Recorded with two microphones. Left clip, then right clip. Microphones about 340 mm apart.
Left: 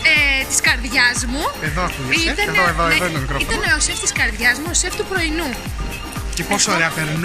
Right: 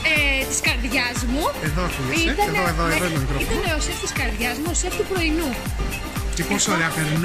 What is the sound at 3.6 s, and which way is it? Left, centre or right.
Speech, centre.